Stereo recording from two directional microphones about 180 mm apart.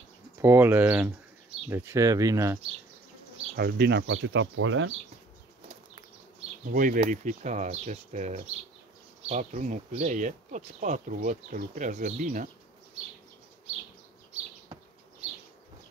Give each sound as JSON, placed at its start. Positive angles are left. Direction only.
{"t": 0.4, "sound": "speech", "side_deg": -15}
{"t": 3.5, "sound": "speech", "side_deg": -60}
{"t": 6.7, "sound": "speech", "side_deg": -50}